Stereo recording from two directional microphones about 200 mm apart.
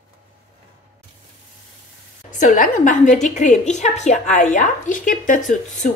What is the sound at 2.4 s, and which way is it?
A woman's voice, 40° left (ahead or behind).